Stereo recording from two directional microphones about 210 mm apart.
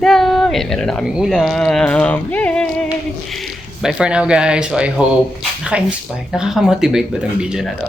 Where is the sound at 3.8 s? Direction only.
5° right (ahead or behind).